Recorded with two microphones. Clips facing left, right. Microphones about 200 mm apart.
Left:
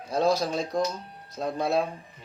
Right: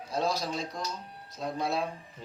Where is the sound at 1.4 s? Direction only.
55° left (ahead or behind).